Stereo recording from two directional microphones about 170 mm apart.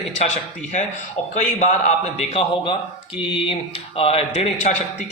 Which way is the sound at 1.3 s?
45° left (ahead or behind).